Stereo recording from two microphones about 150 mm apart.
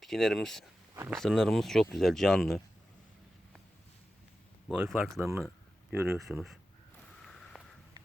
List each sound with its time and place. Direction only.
0.0 s speech: centre (ahead or behind)
4.9 s speech: centre (ahead or behind)
5.2 s speech: 15° right (ahead or behind)
6.1 s speech: centre (ahead or behind)
7.3 s a sound: 5° left (ahead or behind)